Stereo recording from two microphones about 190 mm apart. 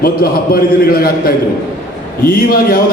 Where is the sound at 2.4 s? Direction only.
50° left (ahead or behind).